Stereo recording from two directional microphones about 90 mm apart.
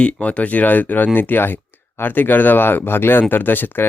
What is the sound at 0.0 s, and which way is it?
Speech, 15° left (ahead or behind).